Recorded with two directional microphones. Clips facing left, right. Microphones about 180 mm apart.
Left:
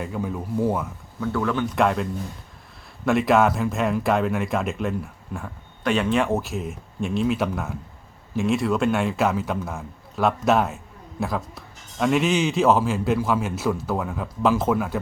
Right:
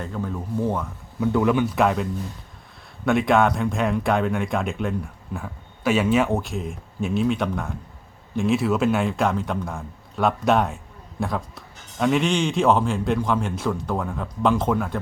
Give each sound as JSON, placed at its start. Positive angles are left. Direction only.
{"t": 0.0, "sound": "speech", "side_deg": 10}
{"t": 1.2, "sound": "speech", "side_deg": -15}
{"t": 1.7, "sound": "speech", "side_deg": 0}
{"t": 3.1, "sound": "speech", "side_deg": 0}